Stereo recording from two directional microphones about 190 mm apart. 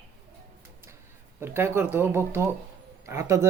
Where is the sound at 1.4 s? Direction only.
10° right (ahead or behind).